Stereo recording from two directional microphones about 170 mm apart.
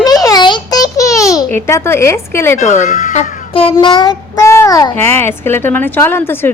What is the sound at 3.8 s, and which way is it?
A child's voice, 25° left (ahead or behind).